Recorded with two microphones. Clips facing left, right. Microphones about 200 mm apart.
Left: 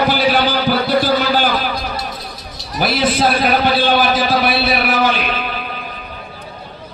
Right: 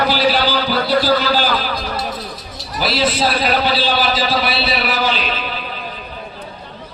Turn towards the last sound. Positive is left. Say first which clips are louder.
# left 2 dB
turn(degrees=55)  # may be behind; listen again after turning